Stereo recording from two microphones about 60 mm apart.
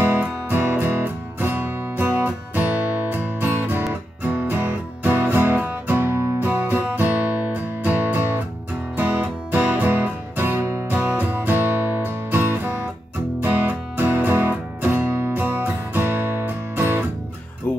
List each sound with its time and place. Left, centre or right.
0.2 s music: right
11.0 s music: right